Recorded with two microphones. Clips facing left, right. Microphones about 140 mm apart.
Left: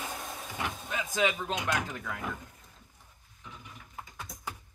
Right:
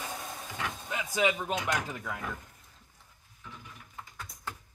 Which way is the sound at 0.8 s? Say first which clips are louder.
Right 1 dB; 10° right (ahead or behind).